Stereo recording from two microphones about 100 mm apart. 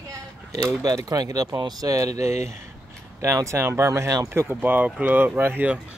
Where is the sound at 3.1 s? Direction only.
30° right (ahead or behind).